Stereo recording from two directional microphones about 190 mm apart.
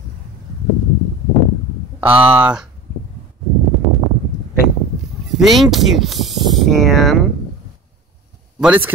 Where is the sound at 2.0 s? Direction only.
10° right (ahead or behind).